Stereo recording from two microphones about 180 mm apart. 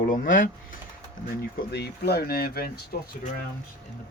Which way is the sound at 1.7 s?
65° left (ahead or behind).